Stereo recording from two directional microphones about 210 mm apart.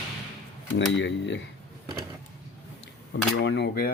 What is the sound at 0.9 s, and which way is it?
Speech, 60° left (ahead or behind).